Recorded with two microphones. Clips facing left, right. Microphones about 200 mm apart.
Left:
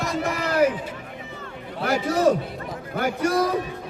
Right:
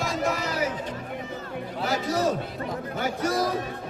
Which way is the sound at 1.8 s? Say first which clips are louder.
Left 5 dB; 60° left (ahead or behind).